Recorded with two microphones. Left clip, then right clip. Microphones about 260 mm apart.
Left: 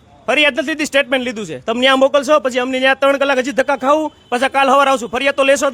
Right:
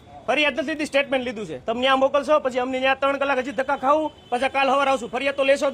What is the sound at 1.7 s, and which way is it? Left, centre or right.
Speech, left.